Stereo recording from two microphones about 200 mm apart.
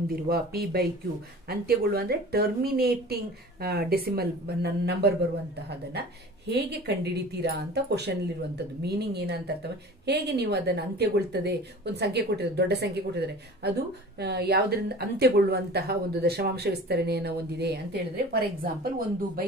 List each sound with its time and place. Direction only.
0.1 s a woman's voice: 50° right (ahead or behind)